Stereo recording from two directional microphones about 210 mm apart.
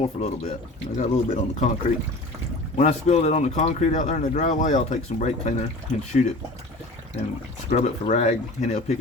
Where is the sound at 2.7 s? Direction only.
35° left (ahead or behind).